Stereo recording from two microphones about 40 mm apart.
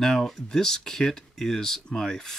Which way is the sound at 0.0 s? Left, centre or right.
Centre.